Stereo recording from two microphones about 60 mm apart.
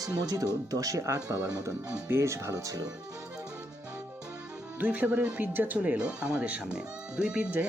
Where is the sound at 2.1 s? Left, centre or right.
Right.